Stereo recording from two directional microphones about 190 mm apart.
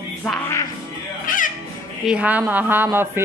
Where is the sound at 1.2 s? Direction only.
45° left (ahead or behind).